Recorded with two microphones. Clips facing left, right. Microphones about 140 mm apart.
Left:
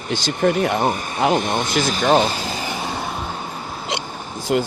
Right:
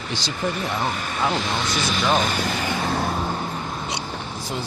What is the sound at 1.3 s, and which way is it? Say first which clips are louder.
Speech: left 5 dB; 50° left (ahead or behind).